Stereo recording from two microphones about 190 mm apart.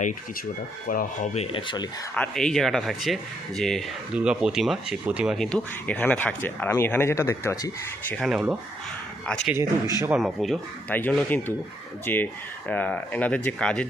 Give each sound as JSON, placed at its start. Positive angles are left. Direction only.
{"t": 0.9, "sound": "speech", "side_deg": 40}
{"t": 2.1, "sound": "speech", "side_deg": 5}
{"t": 8.1, "sound": "speech", "side_deg": 0}